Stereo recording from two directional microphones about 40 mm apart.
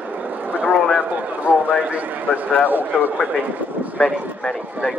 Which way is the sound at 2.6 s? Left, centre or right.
Right.